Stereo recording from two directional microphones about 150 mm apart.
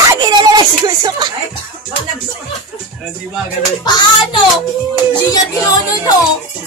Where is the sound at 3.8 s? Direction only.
30° left (ahead or behind).